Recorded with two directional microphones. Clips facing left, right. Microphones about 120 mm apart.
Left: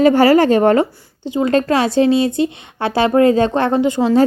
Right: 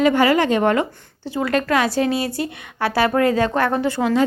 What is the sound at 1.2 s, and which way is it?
Speech, 20° left (ahead or behind).